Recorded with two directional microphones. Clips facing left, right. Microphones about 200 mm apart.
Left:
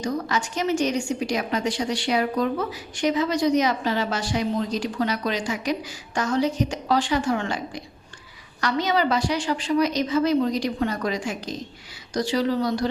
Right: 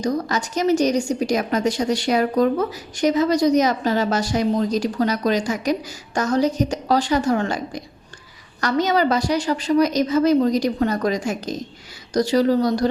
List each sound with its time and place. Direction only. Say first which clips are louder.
0.0 s a woman's voice: right 4 dB; 40° right (ahead or behind)